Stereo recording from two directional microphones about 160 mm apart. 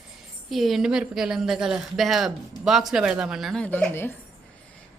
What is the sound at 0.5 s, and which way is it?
A woman's voice, centre (ahead or behind).